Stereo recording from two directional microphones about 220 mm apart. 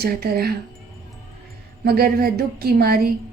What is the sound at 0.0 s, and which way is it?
Speech, 45° right (ahead or behind).